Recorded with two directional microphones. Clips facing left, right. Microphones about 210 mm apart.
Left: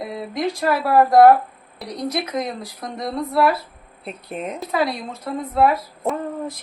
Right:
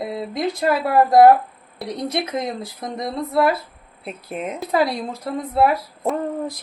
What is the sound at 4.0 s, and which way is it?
Speech, centre (ahead or behind).